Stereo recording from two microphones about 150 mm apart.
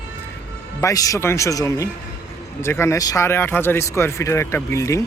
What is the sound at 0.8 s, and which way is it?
Speech, 25° left (ahead or behind).